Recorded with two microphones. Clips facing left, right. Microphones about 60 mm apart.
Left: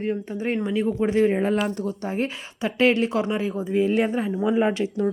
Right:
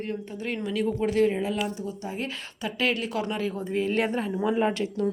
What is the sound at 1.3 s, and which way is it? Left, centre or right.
Speech, left.